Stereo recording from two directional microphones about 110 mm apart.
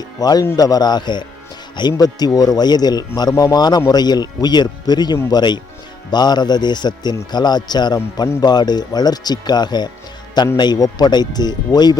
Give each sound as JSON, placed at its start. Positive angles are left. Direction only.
{"t": 0.2, "sound": "speech", "side_deg": 35}